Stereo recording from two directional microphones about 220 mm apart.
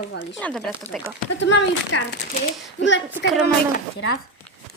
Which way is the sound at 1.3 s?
55° left (ahead or behind).